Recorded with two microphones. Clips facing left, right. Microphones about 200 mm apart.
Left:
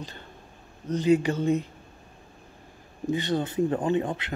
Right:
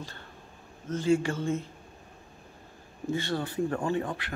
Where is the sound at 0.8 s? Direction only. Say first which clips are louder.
Left 4 dB; 20° left (ahead or behind).